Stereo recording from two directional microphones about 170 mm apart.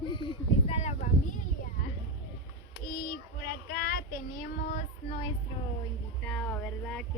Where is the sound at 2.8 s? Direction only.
65° left (ahead or behind); by 5.1 s 45° left (ahead or behind).